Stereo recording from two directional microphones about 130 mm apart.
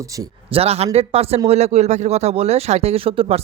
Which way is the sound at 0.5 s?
50° right (ahead or behind).